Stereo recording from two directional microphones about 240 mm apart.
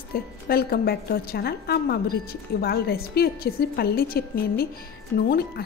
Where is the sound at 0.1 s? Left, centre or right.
Left.